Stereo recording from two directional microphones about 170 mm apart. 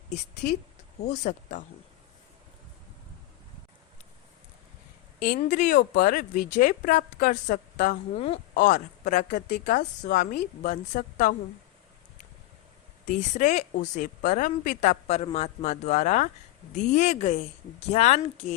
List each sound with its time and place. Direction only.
1.0 s speech: 45° left (ahead or behind)
5.4 s speech: 50° left (ahead or behind)
13.1 s a woman's voice: 45° left (ahead or behind)